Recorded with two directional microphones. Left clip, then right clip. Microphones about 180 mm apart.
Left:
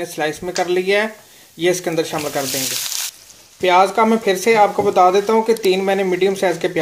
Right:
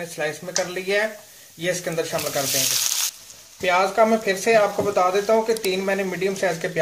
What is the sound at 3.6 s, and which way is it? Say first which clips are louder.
Speech: left 5 dB; 35° left (ahead or behind).